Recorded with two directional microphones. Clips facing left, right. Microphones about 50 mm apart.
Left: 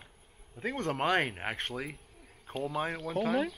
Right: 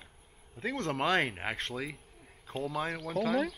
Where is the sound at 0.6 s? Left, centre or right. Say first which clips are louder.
Even; left.